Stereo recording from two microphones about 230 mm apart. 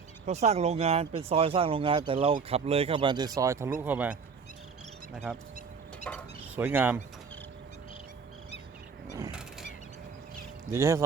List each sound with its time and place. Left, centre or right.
0.3 s speech: right; by 5.4 s centre
6.1 s a sound: centre
6.6 s speech: centre
10.7 s speech: centre